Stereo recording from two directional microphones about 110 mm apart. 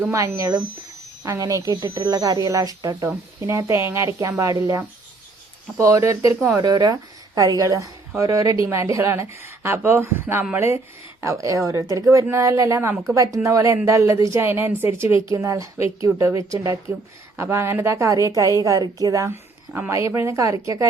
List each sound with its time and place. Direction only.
0.0 s a woman's voice: 25° right (ahead or behind)
6.6 s a woman's voice: 40° right (ahead or behind)